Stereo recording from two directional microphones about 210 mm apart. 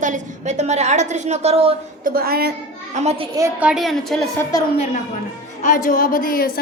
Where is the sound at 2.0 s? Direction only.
45° right (ahead or behind).